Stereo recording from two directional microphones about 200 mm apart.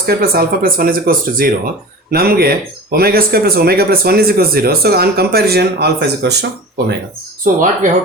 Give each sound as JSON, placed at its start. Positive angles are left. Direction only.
{"t": 0.0, "sound": "speech", "side_deg": -50}
{"t": 7.4, "sound": "speech", "side_deg": -40}